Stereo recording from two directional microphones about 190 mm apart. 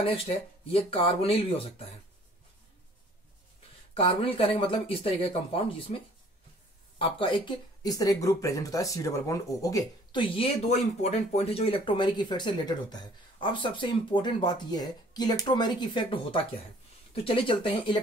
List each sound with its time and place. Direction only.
0.7 s speech: 30° left (ahead or behind)
3.9 s speech: 30° left (ahead or behind)
7.0 s speech: 25° left (ahead or behind)
11.0 s speech: 35° left (ahead or behind)